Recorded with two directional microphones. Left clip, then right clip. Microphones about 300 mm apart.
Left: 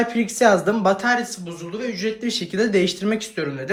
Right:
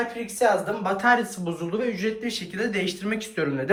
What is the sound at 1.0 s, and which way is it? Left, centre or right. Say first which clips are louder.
A man's voice: even; centre.